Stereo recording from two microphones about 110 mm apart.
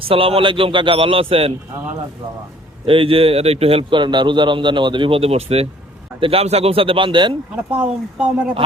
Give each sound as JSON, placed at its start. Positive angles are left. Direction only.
{"t": 0.1, "sound": "a man's voice", "side_deg": -55}
{"t": 2.8, "sound": "a man's voice", "side_deg": -55}
{"t": 7.5, "sound": "speech", "side_deg": -10}